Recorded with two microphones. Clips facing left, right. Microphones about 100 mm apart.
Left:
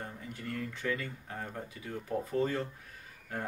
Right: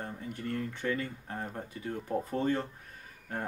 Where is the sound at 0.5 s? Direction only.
30° right (ahead or behind).